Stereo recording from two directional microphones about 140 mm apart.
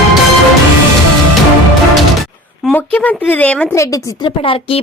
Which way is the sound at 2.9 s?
10° left (ahead or behind).